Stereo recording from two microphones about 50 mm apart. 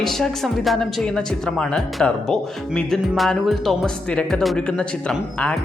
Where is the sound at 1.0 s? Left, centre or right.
Centre.